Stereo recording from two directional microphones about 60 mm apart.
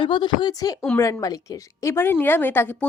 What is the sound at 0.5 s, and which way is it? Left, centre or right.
A woman's voice, left.